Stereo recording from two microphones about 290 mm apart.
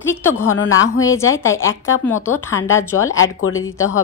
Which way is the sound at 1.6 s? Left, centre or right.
Left.